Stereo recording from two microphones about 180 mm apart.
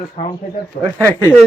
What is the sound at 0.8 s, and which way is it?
Speech, 50° left (ahead or behind).